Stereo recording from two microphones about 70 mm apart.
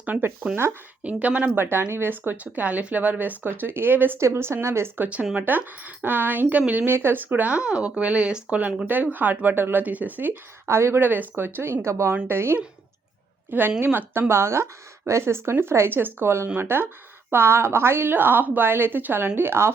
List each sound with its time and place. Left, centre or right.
1.0 s speech: centre
1.9 s speech: right
5.0 s speech: centre
5.5 s speech: right
6.8 s speech: right